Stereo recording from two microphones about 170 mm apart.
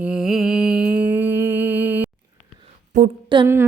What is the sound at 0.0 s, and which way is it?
Mantra, 5° right (ahead or behind).